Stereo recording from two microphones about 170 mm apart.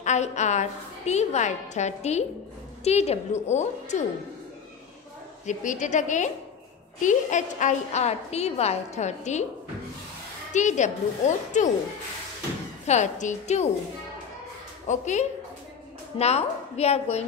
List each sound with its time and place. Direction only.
0.0 s a woman's voice: 45° left (ahead or behind)
5.5 s a woman's voice: 45° left (ahead or behind)
10.5 s a woman's voice: 45° left (ahead or behind)
12.8 s a woman's voice: 45° left (ahead or behind)
14.9 s a woman's voice: 45° left (ahead or behind)